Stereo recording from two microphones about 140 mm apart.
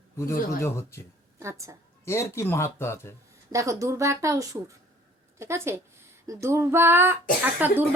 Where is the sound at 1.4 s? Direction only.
20° right (ahead or behind).